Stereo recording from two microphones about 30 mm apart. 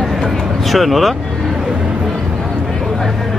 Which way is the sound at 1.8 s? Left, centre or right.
Right.